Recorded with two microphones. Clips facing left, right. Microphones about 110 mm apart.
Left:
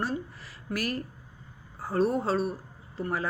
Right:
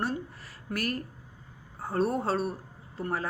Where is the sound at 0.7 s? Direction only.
50° right (ahead or behind).